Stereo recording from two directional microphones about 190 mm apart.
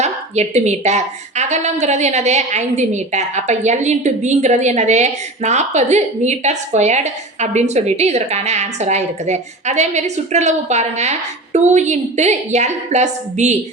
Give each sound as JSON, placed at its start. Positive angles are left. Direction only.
{"t": 0.0, "sound": "a woman's voice", "side_deg": -35}